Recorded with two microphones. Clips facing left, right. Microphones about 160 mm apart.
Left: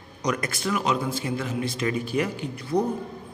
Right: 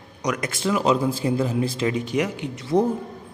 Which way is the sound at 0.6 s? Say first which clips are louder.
Right 6 dB; 30° right (ahead or behind).